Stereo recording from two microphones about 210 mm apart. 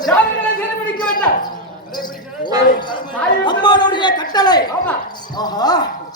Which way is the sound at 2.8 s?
20° left (ahead or behind).